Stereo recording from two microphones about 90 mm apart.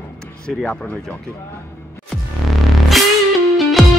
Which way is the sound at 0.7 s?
10° left (ahead or behind).